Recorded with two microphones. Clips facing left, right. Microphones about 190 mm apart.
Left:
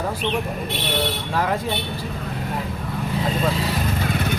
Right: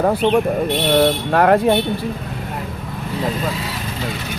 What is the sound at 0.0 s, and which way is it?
Speech, 60° right (ahead or behind).